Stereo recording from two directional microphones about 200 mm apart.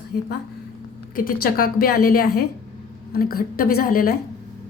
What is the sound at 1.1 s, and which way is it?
A woman's voice, 45° left (ahead or behind).